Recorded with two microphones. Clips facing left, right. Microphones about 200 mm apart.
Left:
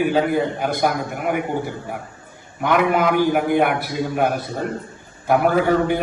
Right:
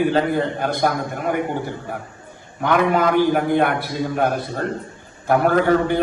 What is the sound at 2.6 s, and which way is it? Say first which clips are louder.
A man's voice: even; 10° left (ahead or behind).